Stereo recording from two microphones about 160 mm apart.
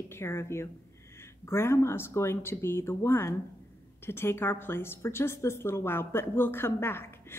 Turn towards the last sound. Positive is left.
turn(degrees=15)  # may be behind; listen again after turning